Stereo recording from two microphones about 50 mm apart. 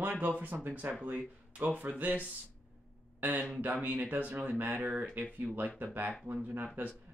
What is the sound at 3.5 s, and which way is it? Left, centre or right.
Speech, right.